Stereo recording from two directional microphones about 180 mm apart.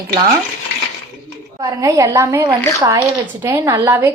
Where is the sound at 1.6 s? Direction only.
20° right (ahead or behind).